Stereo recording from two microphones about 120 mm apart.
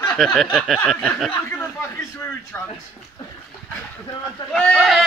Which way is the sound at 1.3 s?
20° left (ahead or behind).